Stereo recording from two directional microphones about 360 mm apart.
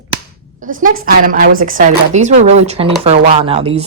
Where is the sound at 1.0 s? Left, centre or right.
Right.